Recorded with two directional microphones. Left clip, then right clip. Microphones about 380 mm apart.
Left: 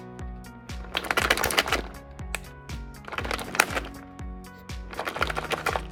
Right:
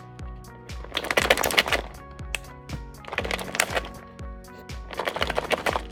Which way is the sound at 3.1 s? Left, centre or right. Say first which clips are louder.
Left 1 dB; centre.